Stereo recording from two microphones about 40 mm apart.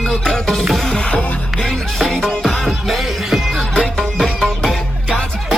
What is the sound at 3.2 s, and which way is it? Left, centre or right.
Music, centre.